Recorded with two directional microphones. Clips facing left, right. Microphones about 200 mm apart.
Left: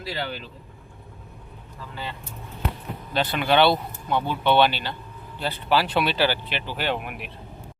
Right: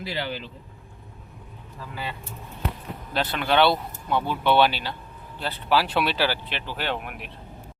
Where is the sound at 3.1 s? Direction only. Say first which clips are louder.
Left 2 dB; centre (ahead or behind).